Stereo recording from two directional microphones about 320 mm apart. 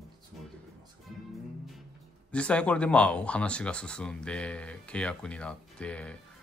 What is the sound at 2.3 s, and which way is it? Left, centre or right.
Speech, centre.